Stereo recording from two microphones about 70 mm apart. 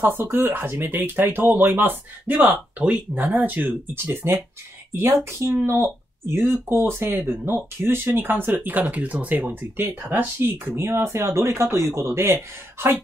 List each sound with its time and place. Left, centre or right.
0.0 s speech: right
5.4 s speech: right